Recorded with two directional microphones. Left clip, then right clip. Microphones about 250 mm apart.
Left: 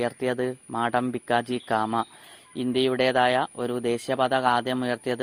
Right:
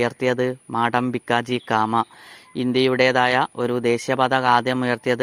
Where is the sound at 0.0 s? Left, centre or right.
Right.